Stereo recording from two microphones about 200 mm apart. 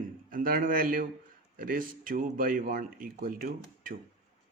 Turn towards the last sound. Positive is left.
turn(degrees=-45)  # may be behind; listen again after turning